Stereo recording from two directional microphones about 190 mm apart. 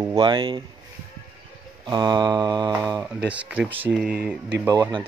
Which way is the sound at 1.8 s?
20° right (ahead or behind).